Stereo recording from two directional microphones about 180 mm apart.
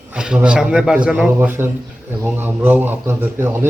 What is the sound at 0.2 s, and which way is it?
A man's voice, 5° right (ahead or behind).